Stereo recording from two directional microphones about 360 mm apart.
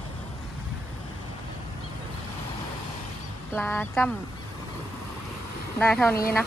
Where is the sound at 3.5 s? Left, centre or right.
Centre.